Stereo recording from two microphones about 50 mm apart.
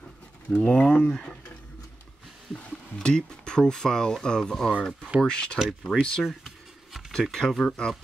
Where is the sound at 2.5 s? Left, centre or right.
Centre.